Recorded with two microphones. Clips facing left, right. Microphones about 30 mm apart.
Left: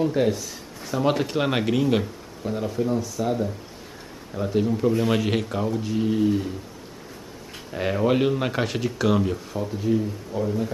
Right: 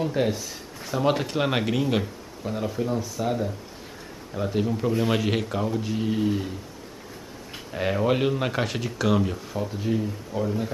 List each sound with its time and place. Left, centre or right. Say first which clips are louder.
0.0 s speech: left 3 dB; centre
7.7 s speech: left 2 dB; centre
9.7 s speech: left 5 dB; centre